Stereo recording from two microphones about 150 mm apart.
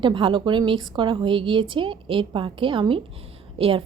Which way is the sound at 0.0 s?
35° right (ahead or behind).